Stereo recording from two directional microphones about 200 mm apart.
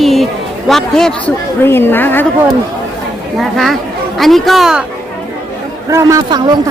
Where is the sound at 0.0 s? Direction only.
Centre (ahead or behind).